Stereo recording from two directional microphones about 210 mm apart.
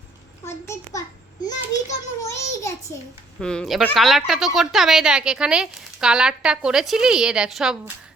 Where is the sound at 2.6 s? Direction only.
15° left (ahead or behind).